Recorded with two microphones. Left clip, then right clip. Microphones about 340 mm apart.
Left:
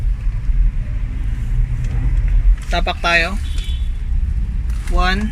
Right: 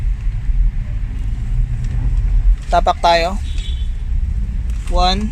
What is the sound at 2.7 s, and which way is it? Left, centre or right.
Speech, right.